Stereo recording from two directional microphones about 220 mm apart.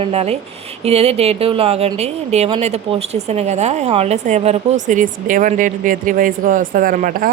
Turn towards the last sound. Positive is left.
turn(degrees=-40)  # may be behind; listen again after turning